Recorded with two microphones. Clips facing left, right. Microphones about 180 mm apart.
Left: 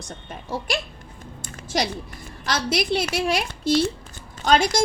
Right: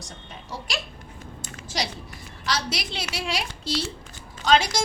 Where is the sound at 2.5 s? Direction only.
50° left (ahead or behind).